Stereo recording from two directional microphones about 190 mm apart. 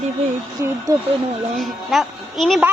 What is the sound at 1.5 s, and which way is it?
A woman's voice, centre (ahead or behind).